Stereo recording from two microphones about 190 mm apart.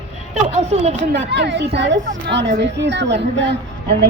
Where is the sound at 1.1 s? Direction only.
65° right (ahead or behind).